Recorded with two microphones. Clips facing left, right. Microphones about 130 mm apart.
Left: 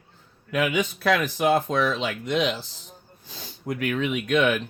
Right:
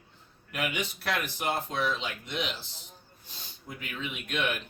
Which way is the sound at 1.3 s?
90° left.